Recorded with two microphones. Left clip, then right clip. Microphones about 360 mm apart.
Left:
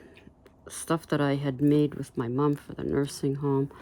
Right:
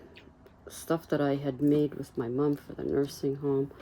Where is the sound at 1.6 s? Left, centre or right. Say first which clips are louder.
Left 2 dB; left.